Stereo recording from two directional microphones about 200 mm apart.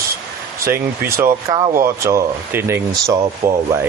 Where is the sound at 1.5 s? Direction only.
20° right (ahead or behind).